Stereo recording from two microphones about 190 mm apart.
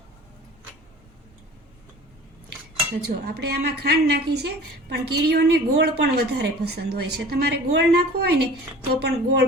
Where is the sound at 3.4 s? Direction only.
60° right (ahead or behind).